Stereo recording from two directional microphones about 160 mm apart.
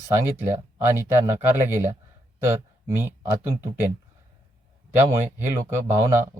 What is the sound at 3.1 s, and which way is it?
Speech, 15° right (ahead or behind).